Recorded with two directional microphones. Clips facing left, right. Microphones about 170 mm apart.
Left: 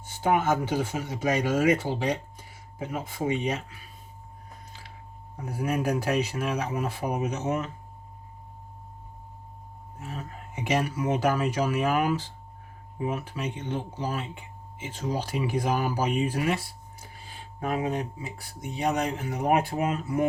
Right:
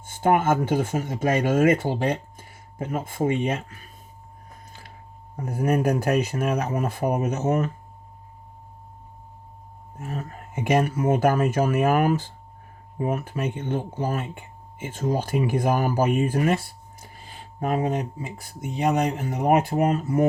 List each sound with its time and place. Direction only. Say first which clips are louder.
0.0 s speech: right 4 dB; 50° right (ahead or behind)
5.5 s speech: right 5 dB; 50° right (ahead or behind)
10.0 s speech: right 5 dB; 45° right (ahead or behind)
17.4 s a sound: right 4 dB; 40° right (ahead or behind)
18.9 s speech: right 4 dB; 40° right (ahead or behind)